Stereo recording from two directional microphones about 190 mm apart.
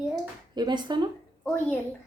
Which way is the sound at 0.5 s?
20° right (ahead or behind).